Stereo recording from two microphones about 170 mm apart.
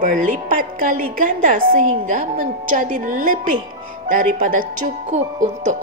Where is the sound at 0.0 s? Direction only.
55° right (ahead or behind).